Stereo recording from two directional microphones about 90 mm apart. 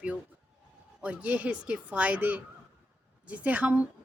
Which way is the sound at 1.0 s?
15° right (ahead or behind).